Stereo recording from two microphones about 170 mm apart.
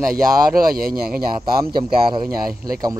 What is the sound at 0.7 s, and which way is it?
Speech, 60° right (ahead or behind).